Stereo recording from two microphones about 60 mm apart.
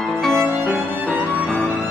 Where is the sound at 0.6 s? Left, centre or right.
Centre.